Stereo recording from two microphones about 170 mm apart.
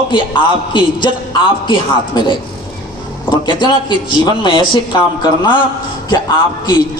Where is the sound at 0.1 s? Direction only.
30° left (ahead or behind).